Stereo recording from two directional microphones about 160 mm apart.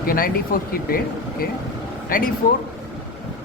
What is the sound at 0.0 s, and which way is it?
Speech, 65° left (ahead or behind).